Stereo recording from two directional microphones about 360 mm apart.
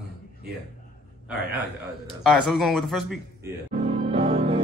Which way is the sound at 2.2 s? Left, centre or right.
Centre.